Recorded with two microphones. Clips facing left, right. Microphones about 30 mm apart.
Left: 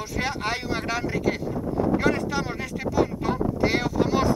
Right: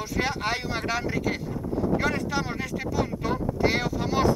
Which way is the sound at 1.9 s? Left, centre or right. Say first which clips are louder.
Left 2 dB; centre.